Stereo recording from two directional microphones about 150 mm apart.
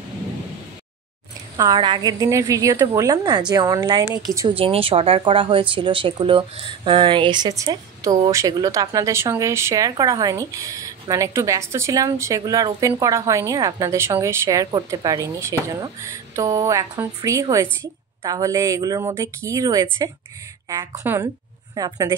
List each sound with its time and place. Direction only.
1.6 s speech: 30° right (ahead or behind)
4.0 s a woman's voice: 10° right (ahead or behind)
4.5 s a woman's voice: 35° right (ahead or behind); by 21.3 s 15° right (ahead or behind)
21.7 s speech: 25° right (ahead or behind)